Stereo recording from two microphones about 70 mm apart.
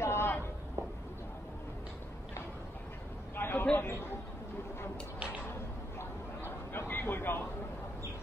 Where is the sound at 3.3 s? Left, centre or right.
Left.